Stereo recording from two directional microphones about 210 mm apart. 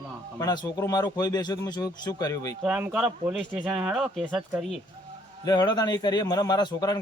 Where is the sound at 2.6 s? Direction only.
5° right (ahead or behind).